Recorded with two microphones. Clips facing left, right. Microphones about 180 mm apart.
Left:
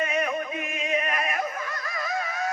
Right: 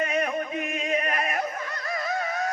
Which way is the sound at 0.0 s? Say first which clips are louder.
Right 1 dB; 40° right (ahead or behind).